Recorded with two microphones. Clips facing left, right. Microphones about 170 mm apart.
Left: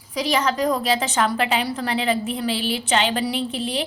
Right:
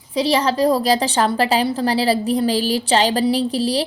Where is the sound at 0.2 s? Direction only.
30° right (ahead or behind).